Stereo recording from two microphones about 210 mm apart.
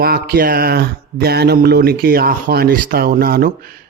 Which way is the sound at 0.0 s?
45° right (ahead or behind).